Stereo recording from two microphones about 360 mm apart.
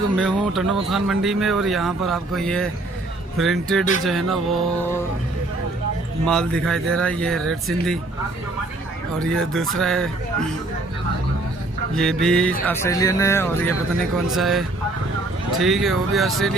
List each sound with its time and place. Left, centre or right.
0.2 s speech: centre
6.2 s speech: centre
9.1 s speech: centre
11.9 s speech: centre